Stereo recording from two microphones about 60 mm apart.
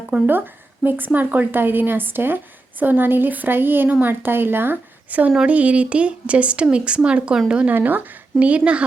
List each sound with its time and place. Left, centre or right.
0.3 s speech: right; by 7.7 s centre
7.7 s speech: right
8.4 s speech: right